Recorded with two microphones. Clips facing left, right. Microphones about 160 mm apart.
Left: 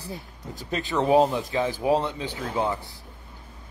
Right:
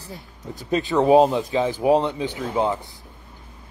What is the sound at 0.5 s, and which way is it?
Speech, 20° right (ahead or behind).